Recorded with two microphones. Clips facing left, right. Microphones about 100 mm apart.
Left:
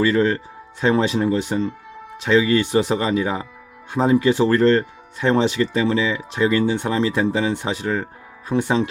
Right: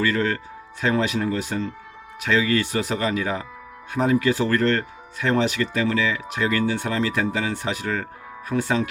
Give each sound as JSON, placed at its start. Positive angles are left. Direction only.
{"t": 0.0, "sound": "speech", "side_deg": 25}